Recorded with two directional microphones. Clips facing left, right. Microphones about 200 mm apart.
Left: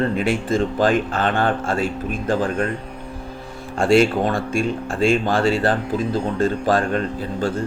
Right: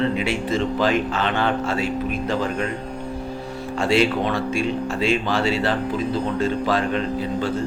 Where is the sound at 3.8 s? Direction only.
50° left (ahead or behind).